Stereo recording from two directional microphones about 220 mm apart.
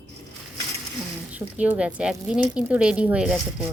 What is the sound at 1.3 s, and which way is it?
Speech, 5° right (ahead or behind).